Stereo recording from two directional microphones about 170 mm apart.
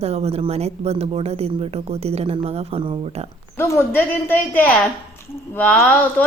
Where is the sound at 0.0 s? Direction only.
40° right (ahead or behind).